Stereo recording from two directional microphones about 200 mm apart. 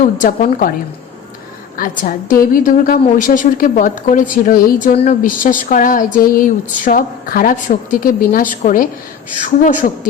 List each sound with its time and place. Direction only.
0.0 s a woman's voice: 40° left (ahead or behind)
1.7 s a woman's voice: 45° left (ahead or behind)